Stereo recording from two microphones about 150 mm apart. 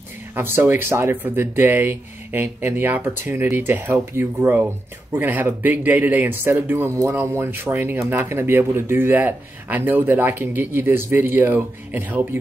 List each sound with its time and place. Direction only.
0.3 s speech: 15° right (ahead or behind)